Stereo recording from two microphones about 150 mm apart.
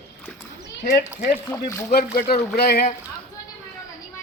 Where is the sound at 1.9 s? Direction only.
90° left.